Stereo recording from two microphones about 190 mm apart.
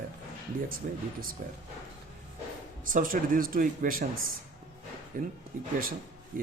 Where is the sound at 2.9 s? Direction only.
45° right (ahead or behind).